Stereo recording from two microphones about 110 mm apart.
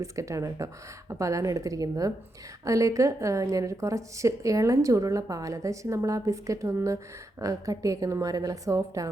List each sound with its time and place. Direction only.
0.0 s a woman's voice: 30° right (ahead or behind)